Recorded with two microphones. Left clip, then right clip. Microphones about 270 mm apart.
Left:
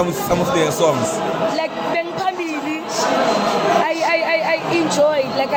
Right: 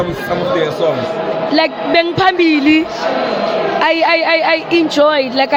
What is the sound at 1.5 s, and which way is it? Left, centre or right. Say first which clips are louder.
Speech: right 8 dB; right.